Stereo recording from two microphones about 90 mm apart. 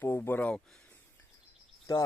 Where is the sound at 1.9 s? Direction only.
40° left (ahead or behind).